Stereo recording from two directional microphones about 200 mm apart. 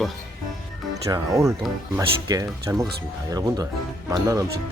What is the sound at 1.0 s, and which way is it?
Speech, 15° right (ahead or behind).